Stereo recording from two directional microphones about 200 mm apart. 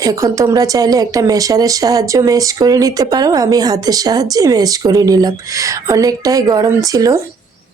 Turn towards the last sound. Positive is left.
turn(degrees=-15)  # may be behind; listen again after turning